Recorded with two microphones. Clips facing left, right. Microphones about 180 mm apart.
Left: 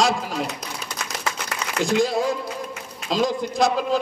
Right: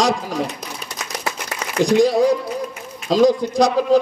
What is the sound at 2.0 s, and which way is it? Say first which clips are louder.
A man's voice: right 7 dB; 40° right (ahead or behind).